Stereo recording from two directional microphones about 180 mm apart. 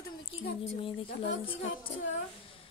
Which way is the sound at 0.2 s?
30° left (ahead or behind).